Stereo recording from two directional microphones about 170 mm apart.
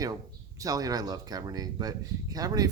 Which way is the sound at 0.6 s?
20° right (ahead or behind).